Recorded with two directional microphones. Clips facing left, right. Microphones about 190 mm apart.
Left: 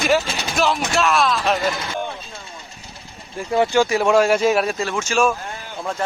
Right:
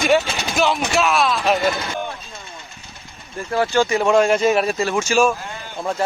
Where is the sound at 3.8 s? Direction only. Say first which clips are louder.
Even; 5° left (ahead or behind).